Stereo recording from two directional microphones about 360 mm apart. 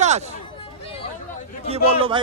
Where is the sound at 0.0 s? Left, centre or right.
Centre.